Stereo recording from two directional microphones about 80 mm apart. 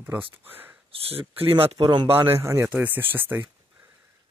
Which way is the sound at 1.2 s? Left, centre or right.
Right.